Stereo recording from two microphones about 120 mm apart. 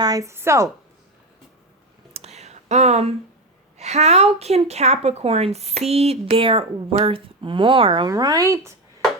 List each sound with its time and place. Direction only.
0.0 s a woman's voice: 30° right (ahead or behind)
2.1 s a sound: 60° right (ahead or behind)
3.8 s a woman's voice: 65° right (ahead or behind); by 8.1 s 45° right (ahead or behind)
8.1 s a woman's voice: 30° right (ahead or behind)